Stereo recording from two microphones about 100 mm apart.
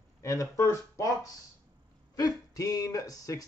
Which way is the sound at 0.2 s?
30° left (ahead or behind).